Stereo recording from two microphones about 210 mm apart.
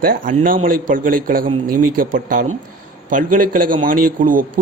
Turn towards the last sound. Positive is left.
turn(degrees=-40)  # may be behind; listen again after turning